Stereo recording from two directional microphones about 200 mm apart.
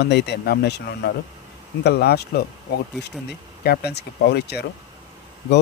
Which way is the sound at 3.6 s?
50° left (ahead or behind).